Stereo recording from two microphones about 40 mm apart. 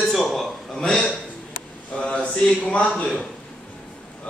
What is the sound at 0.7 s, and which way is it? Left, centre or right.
Speech, centre.